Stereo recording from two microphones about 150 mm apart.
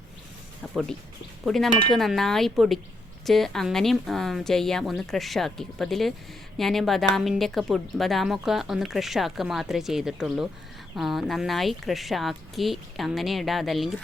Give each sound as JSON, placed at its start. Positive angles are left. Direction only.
{"t": 0.6, "sound": "speech", "side_deg": 0}